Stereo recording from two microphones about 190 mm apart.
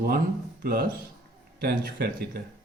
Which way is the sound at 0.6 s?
55° right (ahead or behind).